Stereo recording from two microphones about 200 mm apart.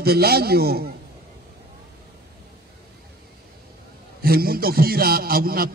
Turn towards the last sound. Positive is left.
turn(degrees=-50)  # may be behind; listen again after turning